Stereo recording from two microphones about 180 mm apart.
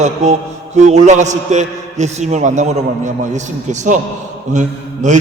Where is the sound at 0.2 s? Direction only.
40° right (ahead or behind).